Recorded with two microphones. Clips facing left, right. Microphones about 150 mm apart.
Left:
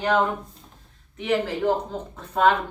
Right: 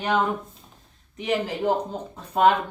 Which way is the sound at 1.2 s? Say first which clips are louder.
Left 2 dB; 15° right (ahead or behind).